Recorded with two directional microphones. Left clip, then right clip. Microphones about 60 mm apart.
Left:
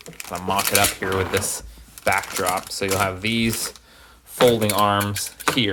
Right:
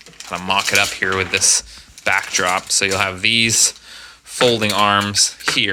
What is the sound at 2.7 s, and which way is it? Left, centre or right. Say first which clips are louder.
Speech: right 7 dB; left.